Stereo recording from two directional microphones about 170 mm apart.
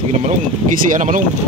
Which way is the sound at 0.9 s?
50° right (ahead or behind).